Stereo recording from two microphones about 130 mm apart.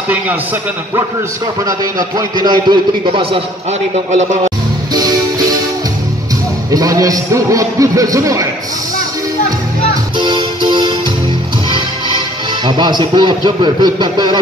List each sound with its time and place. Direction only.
1.6 s a man's voice: 30° right (ahead or behind); by 3.4 s 45° right (ahead or behind)
3.9 s a man's voice: 60° right (ahead or behind)
4.9 s music: 30° right (ahead or behind)
6.7 s a man's voice: 25° right (ahead or behind)
10.1 s music: 35° right (ahead or behind)
12.6 s a man's voice: 35° right (ahead or behind)